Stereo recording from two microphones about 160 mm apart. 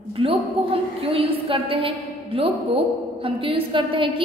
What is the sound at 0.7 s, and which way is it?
A woman's voice, 35° right (ahead or behind).